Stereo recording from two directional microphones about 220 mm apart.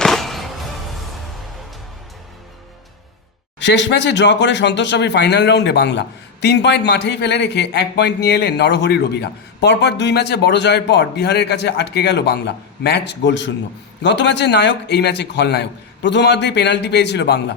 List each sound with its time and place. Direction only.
0.0 s music: centre (ahead or behind)
3.6 s speech: 55° left (ahead or behind)